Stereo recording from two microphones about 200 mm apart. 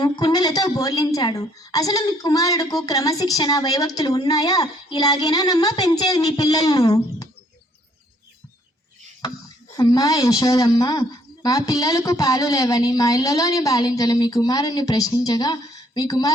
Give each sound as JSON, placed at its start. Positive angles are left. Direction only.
{"t": 0.0, "sound": "a woman's voice", "side_deg": 20}
{"t": 9.7, "sound": "a woman's voice", "side_deg": 20}